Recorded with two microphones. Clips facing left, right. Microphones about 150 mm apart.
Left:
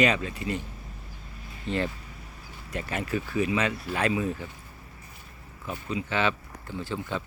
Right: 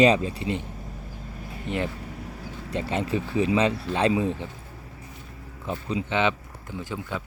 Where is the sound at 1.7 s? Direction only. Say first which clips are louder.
Even; 60° right (ahead or behind).